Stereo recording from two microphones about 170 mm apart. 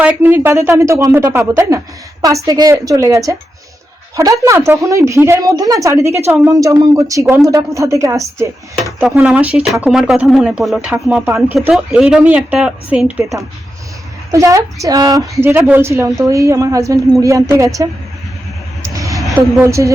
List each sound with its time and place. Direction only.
0.0 s a woman's voice: 10° right (ahead or behind)
4.4 s a woman's voice: 15° right (ahead or behind)
11.3 s speech: centre (ahead or behind)
14.3 s a woman's voice: 20° right (ahead or behind)
18.8 s vehicle: 20° right (ahead or behind)
19.4 s a woman's voice: 15° right (ahead or behind)